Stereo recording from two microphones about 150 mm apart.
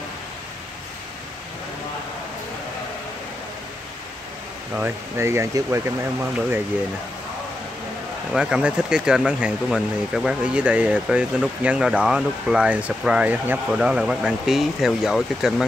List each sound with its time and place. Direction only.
4.7 s speech: 15° right (ahead or behind)
8.3 s speech: 5° right (ahead or behind)